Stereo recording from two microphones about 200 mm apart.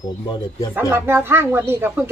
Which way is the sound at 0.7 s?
10° right (ahead or behind).